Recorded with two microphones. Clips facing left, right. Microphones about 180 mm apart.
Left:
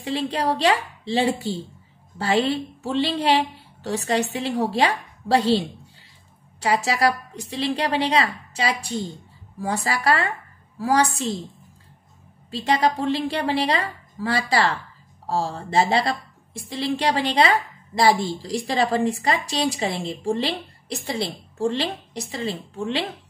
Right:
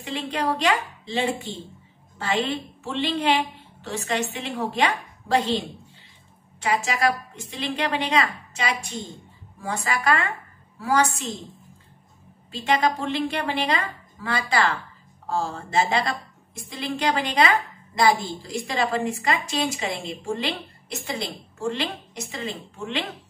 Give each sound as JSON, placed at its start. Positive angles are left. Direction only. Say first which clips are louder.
{"t": 0.0, "sound": "a woman's voice", "louder": "left 3 dB", "side_deg": 35}
{"t": 12.4, "sound": "a woman's voice", "louder": "left 1 dB", "side_deg": 35}